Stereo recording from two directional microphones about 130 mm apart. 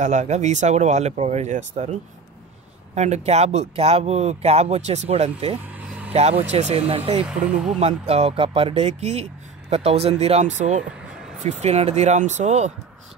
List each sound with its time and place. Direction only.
0.0 s speech: 65° right (ahead or behind)
5.8 s vehicle: 10° right (ahead or behind)
6.1 s speech: 55° right (ahead or behind)
7.2 s speech: 5° right (ahead or behind)
8.1 s speech: 50° right (ahead or behind)